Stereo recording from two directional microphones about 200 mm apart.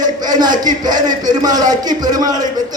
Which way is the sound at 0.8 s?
20° right (ahead or behind).